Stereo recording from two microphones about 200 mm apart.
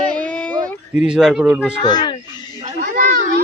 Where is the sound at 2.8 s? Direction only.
40° right (ahead or behind).